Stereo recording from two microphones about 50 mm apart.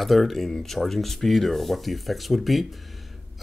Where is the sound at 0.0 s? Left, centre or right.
Centre.